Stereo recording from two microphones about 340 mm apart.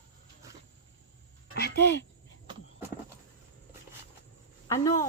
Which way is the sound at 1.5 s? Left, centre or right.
Left.